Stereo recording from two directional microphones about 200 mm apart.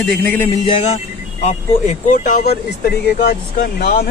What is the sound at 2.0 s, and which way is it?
Speech, 40° left (ahead or behind).